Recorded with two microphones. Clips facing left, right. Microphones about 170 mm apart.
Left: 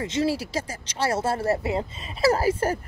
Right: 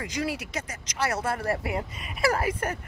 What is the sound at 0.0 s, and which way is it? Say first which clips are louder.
Speech: left 6 dB; 25° left (ahead or behind).